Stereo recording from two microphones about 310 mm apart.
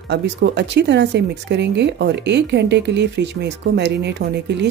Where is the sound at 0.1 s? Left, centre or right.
Right.